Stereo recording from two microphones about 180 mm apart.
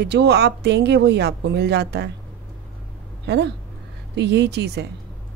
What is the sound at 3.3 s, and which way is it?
A woman's voice, 70° right (ahead or behind).